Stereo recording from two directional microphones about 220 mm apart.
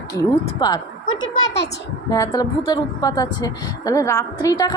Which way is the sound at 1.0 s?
65° left (ahead or behind).